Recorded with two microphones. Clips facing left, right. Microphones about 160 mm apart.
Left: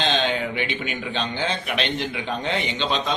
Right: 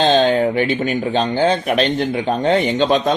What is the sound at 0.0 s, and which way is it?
Speech, 40° right (ahead or behind).